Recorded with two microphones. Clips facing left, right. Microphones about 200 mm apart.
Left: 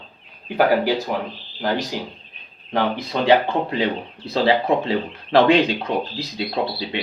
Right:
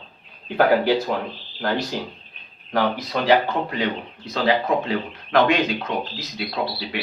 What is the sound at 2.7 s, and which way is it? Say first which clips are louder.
Speech: even; 25° left (ahead or behind).